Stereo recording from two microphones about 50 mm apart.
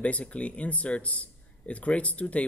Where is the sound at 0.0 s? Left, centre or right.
Left.